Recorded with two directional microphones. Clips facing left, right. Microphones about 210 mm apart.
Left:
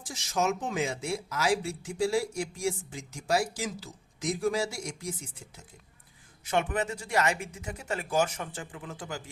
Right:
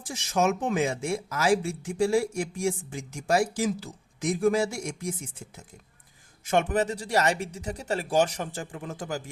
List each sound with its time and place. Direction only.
0.1 s speech: 55° right (ahead or behind)
6.4 s speech: 45° right (ahead or behind)